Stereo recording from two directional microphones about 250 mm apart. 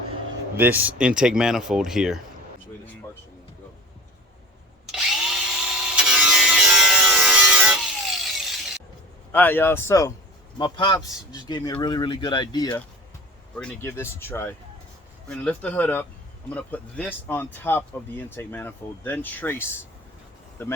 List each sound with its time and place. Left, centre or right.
0.5 s speech: centre
4.9 s tools: centre
8.4 s shatter: centre
9.3 s speech: centre